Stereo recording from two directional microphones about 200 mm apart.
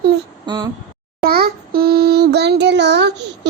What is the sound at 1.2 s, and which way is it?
Child singing, 50° right (ahead or behind).